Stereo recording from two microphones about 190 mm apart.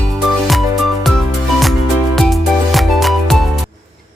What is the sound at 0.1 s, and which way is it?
Music, centre (ahead or behind).